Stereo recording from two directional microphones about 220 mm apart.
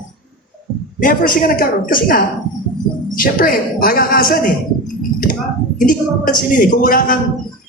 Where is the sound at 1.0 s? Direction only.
40° left (ahead or behind).